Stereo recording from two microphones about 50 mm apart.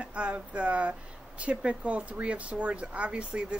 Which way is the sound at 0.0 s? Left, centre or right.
Right.